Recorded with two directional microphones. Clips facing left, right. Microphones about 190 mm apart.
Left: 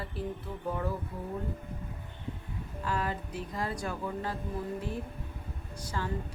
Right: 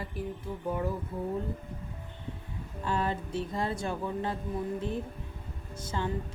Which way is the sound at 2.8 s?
25° right (ahead or behind).